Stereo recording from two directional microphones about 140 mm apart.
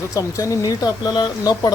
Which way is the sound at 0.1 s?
20° left (ahead or behind).